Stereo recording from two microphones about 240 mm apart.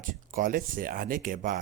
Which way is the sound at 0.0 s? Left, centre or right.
Right.